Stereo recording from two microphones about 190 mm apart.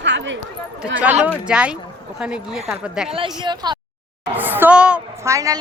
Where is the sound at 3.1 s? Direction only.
30° right (ahead or behind).